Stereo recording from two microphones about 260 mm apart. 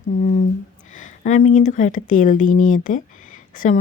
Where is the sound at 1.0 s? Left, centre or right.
Left.